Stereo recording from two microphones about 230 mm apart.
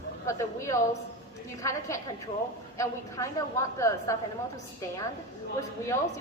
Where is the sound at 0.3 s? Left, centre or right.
Centre.